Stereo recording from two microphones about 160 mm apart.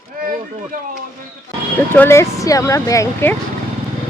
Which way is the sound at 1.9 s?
15° left (ahead or behind).